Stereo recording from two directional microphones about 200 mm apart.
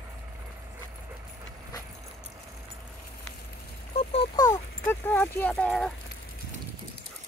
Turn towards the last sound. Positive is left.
turn(degrees=0)  # may be behind; listen again after turning